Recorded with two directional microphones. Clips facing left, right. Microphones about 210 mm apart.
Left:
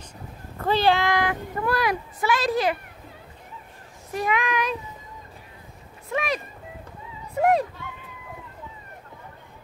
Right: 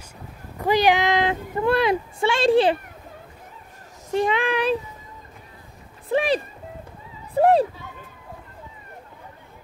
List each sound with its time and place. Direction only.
0.6 s a child's voice: 15° right (ahead or behind); by 2.8 s 30° right (ahead or behind)
4.1 s speech: 30° right (ahead or behind)
6.0 s speech: 30° right (ahead or behind)
7.3 s a sound: 30° right (ahead or behind)